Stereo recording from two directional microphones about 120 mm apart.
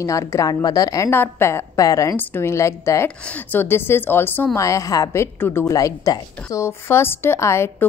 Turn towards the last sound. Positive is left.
turn(degrees=20)  # may be behind; listen again after turning